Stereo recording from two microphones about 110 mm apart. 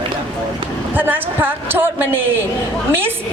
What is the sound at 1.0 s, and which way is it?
A woman's voice, 20° right (ahead or behind).